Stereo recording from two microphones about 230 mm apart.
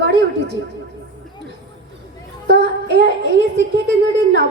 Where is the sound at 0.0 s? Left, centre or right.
Right.